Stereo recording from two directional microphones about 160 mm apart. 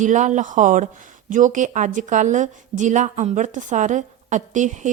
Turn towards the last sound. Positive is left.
turn(degrees=-50)  # may be behind; listen again after turning